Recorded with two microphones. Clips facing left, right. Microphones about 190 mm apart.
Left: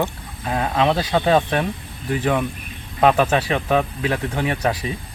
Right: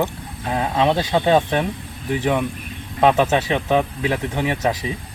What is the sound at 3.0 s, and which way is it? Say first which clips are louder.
Speech: even; 20° right (ahead or behind).